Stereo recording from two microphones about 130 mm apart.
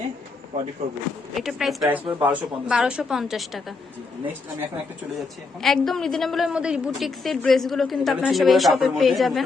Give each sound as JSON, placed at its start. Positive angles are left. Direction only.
{"t": 0.8, "sound": "speech", "side_deg": -60}
{"t": 1.4, "sound": "a woman's voice", "side_deg": 0}
{"t": 5.6, "sound": "a woman's voice", "side_deg": 0}